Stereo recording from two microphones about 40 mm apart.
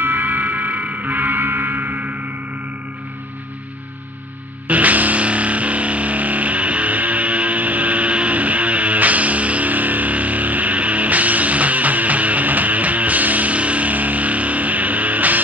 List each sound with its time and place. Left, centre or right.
0.0 s music: right
4.6 s music: right